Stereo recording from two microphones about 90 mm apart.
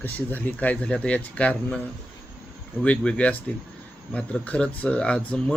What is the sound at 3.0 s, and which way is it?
Speech, 10° left (ahead or behind).